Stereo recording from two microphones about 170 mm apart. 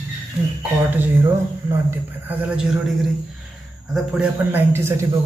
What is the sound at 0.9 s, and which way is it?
Speech, 10° right (ahead or behind).